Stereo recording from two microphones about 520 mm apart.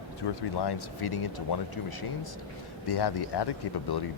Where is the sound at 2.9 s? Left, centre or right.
Left.